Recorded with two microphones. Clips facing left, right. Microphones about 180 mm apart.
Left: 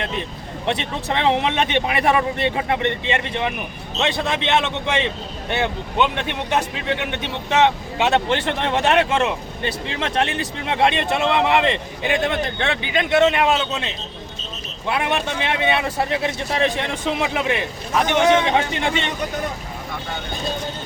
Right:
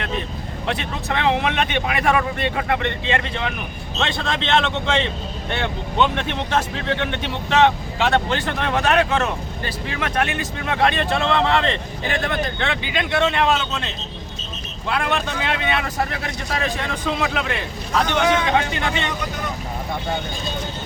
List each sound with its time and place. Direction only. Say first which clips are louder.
0.6 s a man's voice: left 2 dB; 25° left (ahead or behind)
13.2 s a man's voice: right 1 dB; 10° left (ahead or behind)
14.8 s speech: left 1 dB; 20° left (ahead or behind)